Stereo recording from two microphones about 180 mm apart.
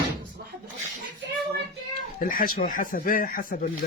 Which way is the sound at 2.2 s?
50° left (ahead or behind).